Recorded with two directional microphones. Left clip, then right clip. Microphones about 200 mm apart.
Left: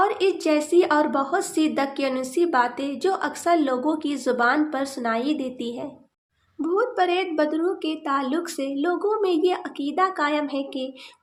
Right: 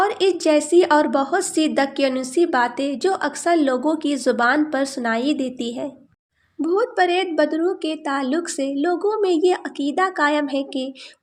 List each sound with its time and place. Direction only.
0.0 s a woman's voice: 30° right (ahead or behind)